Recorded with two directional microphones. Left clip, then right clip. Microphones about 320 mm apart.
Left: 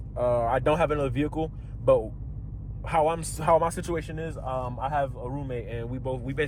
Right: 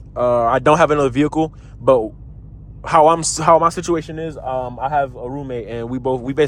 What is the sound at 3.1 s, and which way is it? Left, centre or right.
Speech, right.